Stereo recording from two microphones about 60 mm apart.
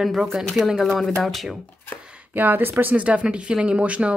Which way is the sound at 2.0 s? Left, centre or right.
Centre.